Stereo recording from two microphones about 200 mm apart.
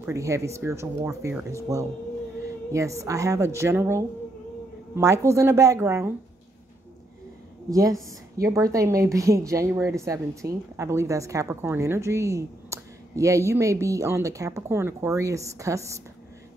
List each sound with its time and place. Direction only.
0.0 s a woman's voice: 15° right (ahead or behind)
7.7 s a woman's voice: 15° right (ahead or behind)